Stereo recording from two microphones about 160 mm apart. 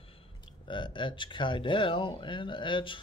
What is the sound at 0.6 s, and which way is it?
Speech, 30° left (ahead or behind).